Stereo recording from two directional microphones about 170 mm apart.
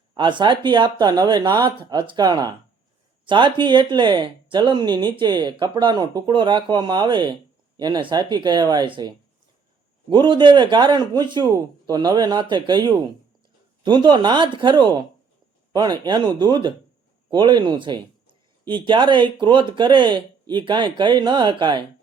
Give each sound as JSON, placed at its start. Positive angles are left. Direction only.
{"t": 0.1, "sound": "a man's voice", "side_deg": -25}